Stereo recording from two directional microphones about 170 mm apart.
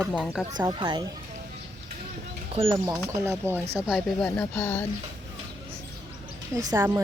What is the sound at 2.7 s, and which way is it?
Speech, 20° right (ahead or behind).